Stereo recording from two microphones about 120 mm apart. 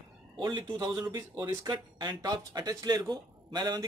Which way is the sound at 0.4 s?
40° right (ahead or behind).